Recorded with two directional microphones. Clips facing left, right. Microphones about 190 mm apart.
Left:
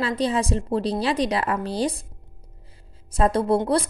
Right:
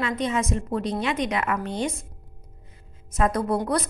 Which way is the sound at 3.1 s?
30° left (ahead or behind).